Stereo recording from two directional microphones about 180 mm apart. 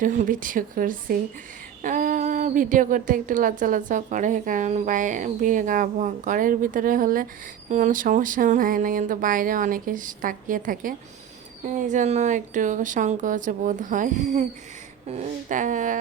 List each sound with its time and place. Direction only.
0.0 s speech: 50° right (ahead or behind)